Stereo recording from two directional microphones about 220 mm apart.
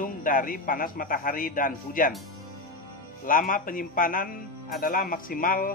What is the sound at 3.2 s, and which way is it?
Speech, 40° left (ahead or behind).